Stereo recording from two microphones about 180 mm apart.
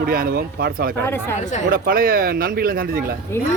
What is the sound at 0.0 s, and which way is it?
Speech, 55° right (ahead or behind).